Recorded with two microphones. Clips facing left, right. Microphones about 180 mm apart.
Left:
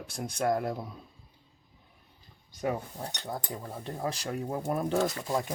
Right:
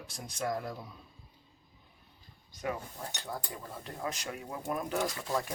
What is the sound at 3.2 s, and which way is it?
Speech, 20° left (ahead or behind).